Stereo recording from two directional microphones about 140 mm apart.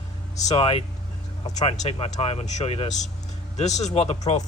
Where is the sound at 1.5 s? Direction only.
50° left (ahead or behind).